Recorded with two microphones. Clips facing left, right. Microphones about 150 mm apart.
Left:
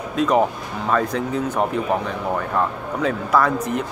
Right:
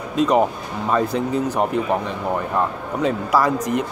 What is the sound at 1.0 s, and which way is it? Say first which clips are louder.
Speech: right 2 dB; 35° right (ahead or behind).